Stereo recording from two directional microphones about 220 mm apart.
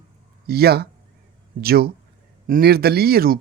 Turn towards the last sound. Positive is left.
turn(degrees=-45)  # may be behind; listen again after turning